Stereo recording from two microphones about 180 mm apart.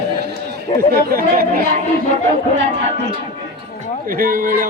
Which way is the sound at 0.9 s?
55° right (ahead or behind).